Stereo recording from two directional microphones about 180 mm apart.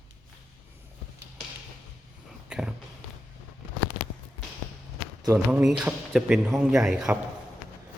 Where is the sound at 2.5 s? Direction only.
5° right (ahead or behind).